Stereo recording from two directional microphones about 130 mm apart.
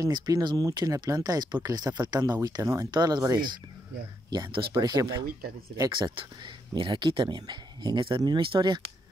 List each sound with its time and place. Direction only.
0.0 s speech: 30° right (ahead or behind)